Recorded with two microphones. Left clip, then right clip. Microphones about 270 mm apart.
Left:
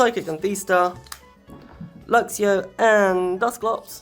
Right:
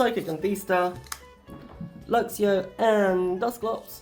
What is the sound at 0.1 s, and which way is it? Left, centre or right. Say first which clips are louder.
Speech: left 3 dB; left.